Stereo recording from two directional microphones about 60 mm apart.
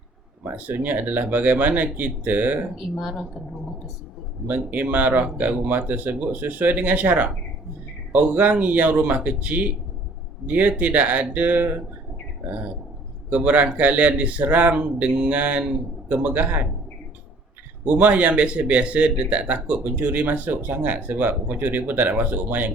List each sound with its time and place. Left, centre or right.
0.5 s speech: right
3.0 s a woman's voice: centre
4.4 s speech: right
13.3 s speech: right
17.8 s speech: right